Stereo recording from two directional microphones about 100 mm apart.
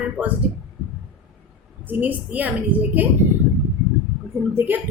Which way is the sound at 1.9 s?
15° right (ahead or behind).